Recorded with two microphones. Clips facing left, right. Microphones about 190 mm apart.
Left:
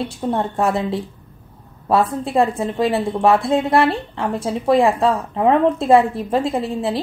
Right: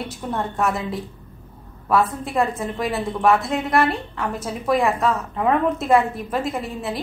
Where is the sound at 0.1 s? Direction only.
30° left (ahead or behind).